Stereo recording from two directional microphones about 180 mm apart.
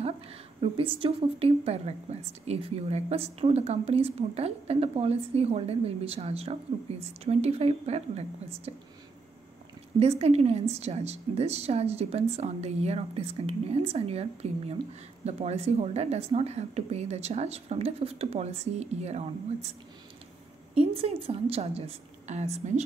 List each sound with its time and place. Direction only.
0.0 s a woman's voice: 30° right (ahead or behind)
9.9 s a woman's voice: 35° right (ahead or behind)
20.7 s a woman's voice: 30° right (ahead or behind)